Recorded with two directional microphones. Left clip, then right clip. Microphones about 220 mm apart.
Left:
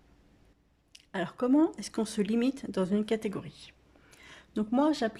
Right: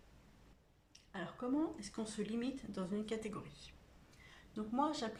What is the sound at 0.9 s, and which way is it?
Speech, 45° left (ahead or behind).